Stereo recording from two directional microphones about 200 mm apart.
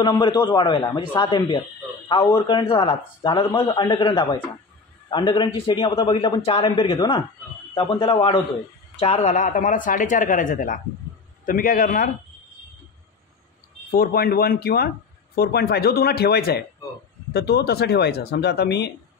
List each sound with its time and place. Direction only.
0.0 s a man's voice: 20° left (ahead or behind); by 12.1 s 45° left (ahead or behind)
13.8 s speech: 45° left (ahead or behind)